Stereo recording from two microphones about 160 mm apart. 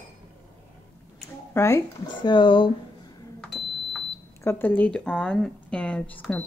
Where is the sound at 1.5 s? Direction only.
20° left (ahead or behind).